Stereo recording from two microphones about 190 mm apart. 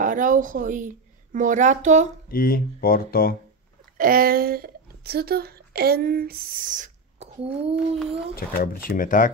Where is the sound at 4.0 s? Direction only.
50° right (ahead or behind); by 7.8 s 30° right (ahead or behind).